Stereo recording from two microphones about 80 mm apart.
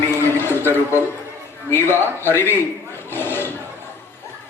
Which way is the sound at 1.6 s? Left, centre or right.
Left.